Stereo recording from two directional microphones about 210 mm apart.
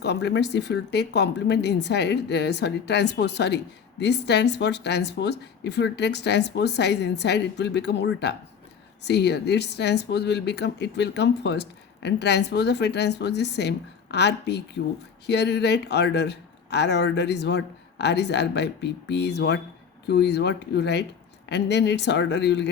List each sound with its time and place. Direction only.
0.0 s speech: 50° left (ahead or behind)